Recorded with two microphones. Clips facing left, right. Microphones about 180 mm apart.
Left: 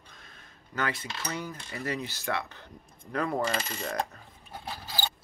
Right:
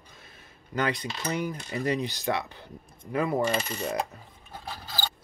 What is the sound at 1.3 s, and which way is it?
Speech, 15° right (ahead or behind).